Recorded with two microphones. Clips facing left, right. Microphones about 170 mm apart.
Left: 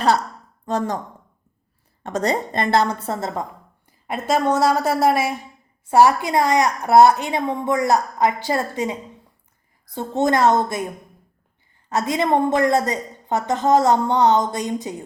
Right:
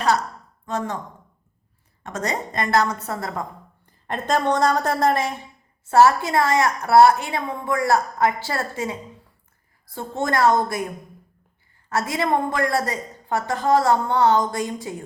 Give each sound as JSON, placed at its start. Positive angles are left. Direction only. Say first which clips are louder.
{"t": 0.6, "sound": "speech", "louder": "left 4 dB", "side_deg": 35}
{"t": 2.0, "sound": "a woman's voice", "louder": "left 5 dB", "side_deg": 30}
{"t": 4.0, "sound": "a woman's voice", "louder": "left 2 dB", "side_deg": 5}
{"t": 11.9, "sound": "a woman's voice", "louder": "left 3 dB", "side_deg": 20}